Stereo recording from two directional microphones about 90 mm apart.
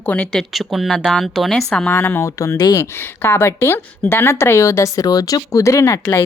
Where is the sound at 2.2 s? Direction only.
35° left (ahead or behind).